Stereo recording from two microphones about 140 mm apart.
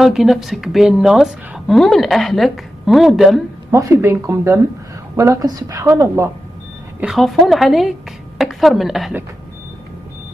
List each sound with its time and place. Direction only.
0.0 s a woman's voice: centre (ahead or behind)
3.7 s a woman's voice: 20° right (ahead or behind)
7.0 s a woman's voice: centre (ahead or behind)